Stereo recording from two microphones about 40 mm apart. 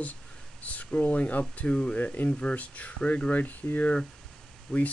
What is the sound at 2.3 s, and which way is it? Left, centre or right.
Speech, left.